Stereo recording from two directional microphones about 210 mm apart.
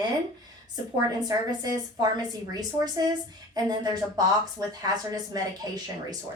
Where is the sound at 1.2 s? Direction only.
20° right (ahead or behind).